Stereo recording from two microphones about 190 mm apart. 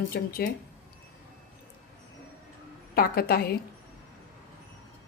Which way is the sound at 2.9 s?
50° left (ahead or behind).